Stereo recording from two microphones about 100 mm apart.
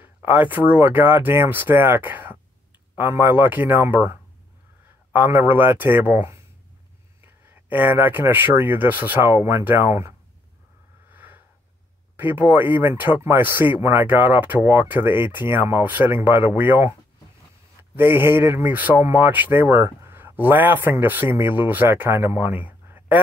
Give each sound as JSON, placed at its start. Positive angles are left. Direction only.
{"t": 0.0, "sound": "speech", "side_deg": -20}
{"t": 5.1, "sound": "speech", "side_deg": -20}
{"t": 7.4, "sound": "speech", "side_deg": -20}
{"t": 11.1, "sound": "wheeze", "side_deg": -20}
{"t": 12.2, "sound": "speech", "side_deg": -20}
{"t": 17.9, "sound": "speech", "side_deg": -20}
{"t": 22.7, "sound": "a sound", "side_deg": -20}